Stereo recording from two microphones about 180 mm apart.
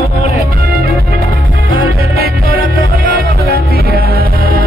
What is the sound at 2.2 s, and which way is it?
Music, 55° right (ahead or behind).